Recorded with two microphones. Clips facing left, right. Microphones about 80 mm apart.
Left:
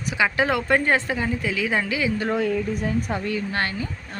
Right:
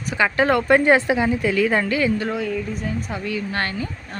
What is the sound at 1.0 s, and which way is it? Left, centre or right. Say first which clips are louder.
Speech: right 6 dB; centre.